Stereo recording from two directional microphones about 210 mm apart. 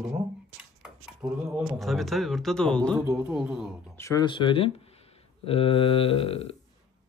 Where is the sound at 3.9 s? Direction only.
15° left (ahead or behind).